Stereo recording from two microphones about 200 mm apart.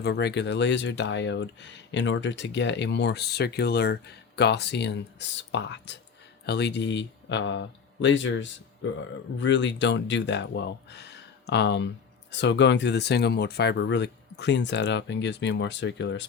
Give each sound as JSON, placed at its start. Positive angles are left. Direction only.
{"t": 0.0, "sound": "speech", "side_deg": 55}